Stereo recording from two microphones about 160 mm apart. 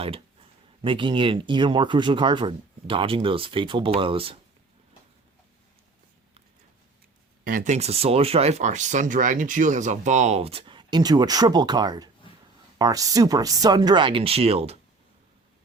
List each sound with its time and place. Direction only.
0.8 s speech: 30° right (ahead or behind)
7.4 s speech: 55° right (ahead or behind); by 14.8 s 40° right (ahead or behind)